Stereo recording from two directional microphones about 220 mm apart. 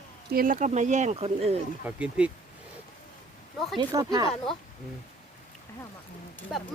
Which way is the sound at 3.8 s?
20° right (ahead or behind).